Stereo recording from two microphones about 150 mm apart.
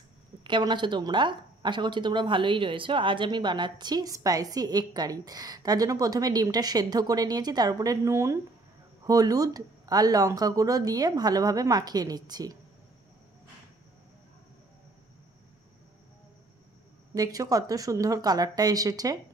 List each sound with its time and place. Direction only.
0.4 s speech: 30° right (ahead or behind)
17.1 s speech: 25° right (ahead or behind)